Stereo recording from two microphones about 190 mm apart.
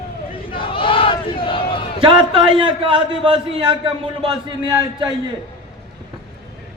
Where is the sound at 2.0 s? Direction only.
30° right (ahead or behind).